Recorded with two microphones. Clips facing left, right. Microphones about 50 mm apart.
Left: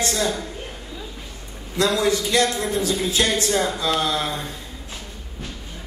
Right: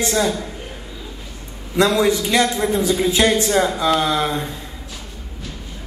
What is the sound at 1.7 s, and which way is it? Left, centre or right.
A man's voice, right.